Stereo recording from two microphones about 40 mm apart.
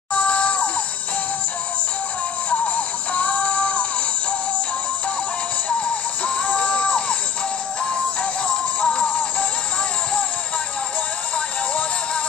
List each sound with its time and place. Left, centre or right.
0.1 s screaming: left
2.7 s music: left
6.2 s music: left